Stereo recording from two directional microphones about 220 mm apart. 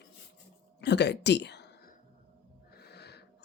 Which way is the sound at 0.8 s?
50° left (ahead or behind).